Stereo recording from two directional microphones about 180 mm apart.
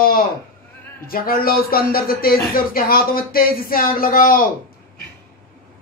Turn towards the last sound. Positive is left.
turn(degrees=50)  # may be behind; listen again after turning